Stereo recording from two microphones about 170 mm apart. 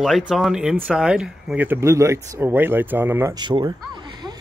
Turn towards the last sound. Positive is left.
turn(degrees=-25)  # may be behind; listen again after turning